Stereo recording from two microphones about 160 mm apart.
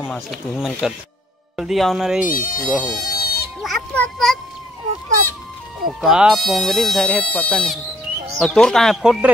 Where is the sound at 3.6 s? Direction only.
Centre (ahead or behind).